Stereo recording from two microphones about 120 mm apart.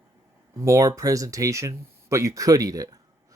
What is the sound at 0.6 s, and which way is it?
Speech, 25° right (ahead or behind).